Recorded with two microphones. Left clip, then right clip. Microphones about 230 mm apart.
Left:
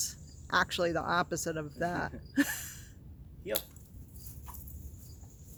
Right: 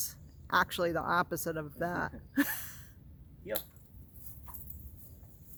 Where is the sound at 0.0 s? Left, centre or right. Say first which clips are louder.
Left 5 dB; centre.